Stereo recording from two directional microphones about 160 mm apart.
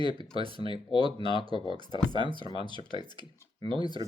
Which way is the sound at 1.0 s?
30° right (ahead or behind).